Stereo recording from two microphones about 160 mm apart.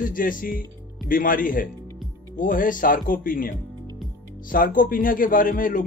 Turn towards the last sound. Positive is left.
turn(degrees=55)  # may be behind; listen again after turning